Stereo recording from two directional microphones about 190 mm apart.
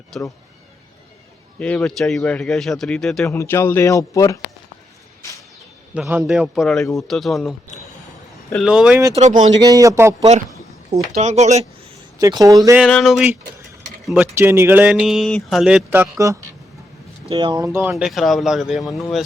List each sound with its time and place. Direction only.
0.1 s speech: 5° left (ahead or behind)
1.5 s speech: 5° left (ahead or behind)
3.2 s speech: 15° left (ahead or behind)
5.9 s speech: 10° right (ahead or behind)
8.5 s speech: 5° right (ahead or behind)
9.1 s speech: 35° right (ahead or behind)
9.6 s speech: 20° right (ahead or behind)
11.2 s speech: 40° right (ahead or behind)
12.2 s speech: 20° right (ahead or behind)
12.8 s speech: centre (ahead or behind)
14.3 s speech: 10° right (ahead or behind)
17.2 s speech: 25° right (ahead or behind)
17.9 s speech: centre (ahead or behind)